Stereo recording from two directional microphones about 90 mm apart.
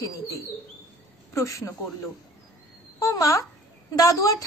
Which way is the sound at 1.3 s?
35° left (ahead or behind).